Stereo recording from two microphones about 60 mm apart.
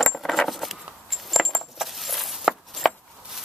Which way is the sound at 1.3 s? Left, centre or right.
Centre.